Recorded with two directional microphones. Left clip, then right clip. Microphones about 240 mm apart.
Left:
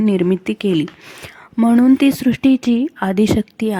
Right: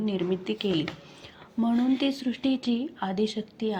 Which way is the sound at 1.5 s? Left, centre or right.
Left.